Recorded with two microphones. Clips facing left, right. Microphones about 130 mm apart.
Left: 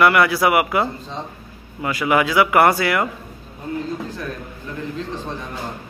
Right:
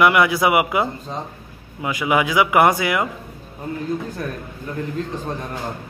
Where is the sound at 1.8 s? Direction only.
15° right (ahead or behind).